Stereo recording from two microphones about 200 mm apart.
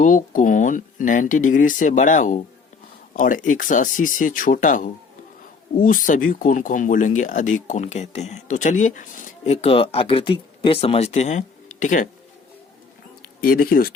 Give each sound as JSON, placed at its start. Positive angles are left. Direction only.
{"t": 0.0, "sound": "speech", "side_deg": 40}
{"t": 13.4, "sound": "speech", "side_deg": 45}